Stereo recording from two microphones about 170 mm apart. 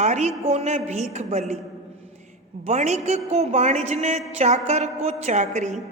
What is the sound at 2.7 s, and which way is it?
A woman's voice, 40° right (ahead or behind).